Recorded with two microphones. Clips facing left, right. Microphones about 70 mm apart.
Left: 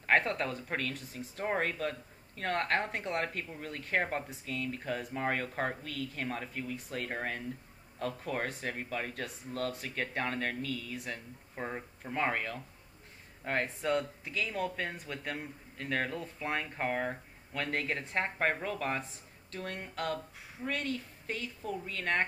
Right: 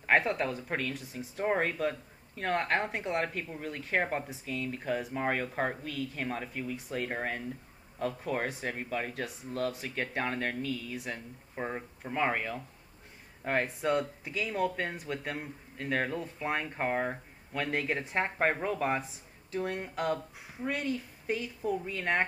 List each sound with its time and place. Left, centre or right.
0.0 s speech: centre